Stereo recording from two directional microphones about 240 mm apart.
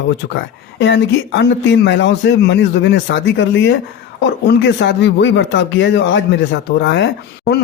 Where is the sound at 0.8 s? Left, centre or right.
Left.